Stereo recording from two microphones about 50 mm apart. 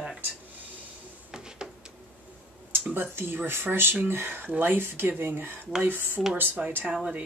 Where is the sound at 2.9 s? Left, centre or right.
Right.